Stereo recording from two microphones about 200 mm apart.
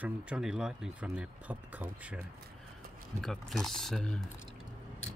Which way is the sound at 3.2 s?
Centre (ahead or behind).